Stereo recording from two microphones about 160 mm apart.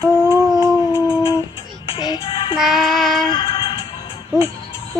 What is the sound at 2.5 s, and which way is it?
Child singing, centre (ahead or behind).